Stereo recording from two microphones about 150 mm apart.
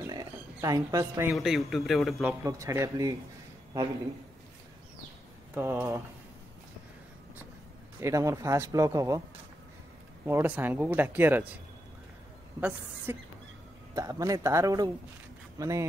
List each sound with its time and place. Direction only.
0.0 s a sound: 25° right (ahead or behind)
1.3 s a man's voice: centre (ahead or behind)
2.4 s speech: 20° right (ahead or behind)
5.5 s speech: 15° right (ahead or behind)
8.0 s speech: 20° right (ahead or behind)
10.2 s speech: 10° right (ahead or behind)
12.5 s speech: 15° right (ahead or behind)